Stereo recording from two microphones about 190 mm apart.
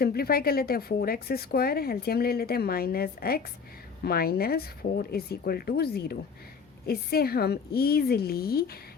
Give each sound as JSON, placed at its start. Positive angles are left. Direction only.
{"t": 0.0, "sound": "a woman's voice", "side_deg": 55}